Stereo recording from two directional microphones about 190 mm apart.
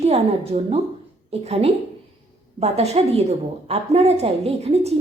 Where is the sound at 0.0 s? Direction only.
35° right (ahead or behind).